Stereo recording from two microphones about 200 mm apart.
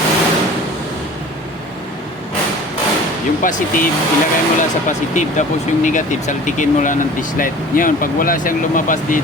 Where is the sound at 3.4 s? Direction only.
40° left (ahead or behind).